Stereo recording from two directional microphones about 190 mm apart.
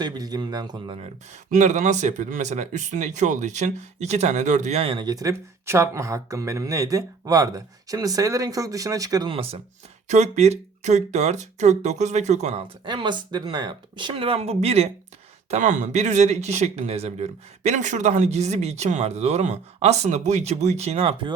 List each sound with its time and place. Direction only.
0.0 s speech: 20° right (ahead or behind)
0.9 s speech: 40° right (ahead or behind)